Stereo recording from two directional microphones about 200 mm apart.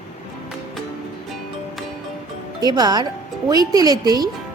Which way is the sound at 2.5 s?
20° right (ahead or behind).